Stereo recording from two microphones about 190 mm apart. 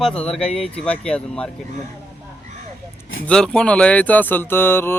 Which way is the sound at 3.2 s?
5° left (ahead or behind).